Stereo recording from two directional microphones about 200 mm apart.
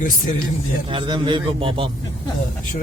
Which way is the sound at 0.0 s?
40° left (ahead or behind).